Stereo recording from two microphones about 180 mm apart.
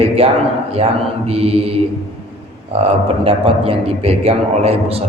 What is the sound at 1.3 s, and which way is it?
Speech, 35° right (ahead or behind).